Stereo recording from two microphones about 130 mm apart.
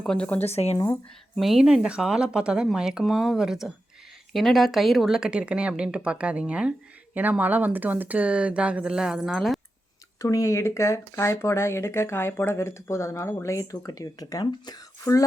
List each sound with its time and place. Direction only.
0.0 s speech: 5° left (ahead or behind)
0.4 s speech: 55° left (ahead or behind)
1.4 s speech: centre (ahead or behind)
10.2 s speech: 25° left (ahead or behind)